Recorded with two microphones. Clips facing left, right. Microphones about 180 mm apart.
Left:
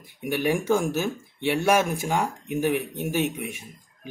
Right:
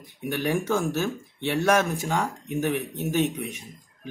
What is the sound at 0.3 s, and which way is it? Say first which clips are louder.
Speech: left 2 dB; 10° left (ahead or behind).